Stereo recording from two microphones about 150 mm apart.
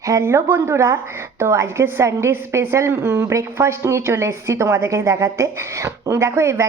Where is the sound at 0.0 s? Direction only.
20° right (ahead or behind).